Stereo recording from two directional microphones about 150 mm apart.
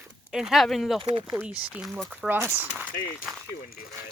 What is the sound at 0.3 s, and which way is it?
Speech, 5° right (ahead or behind).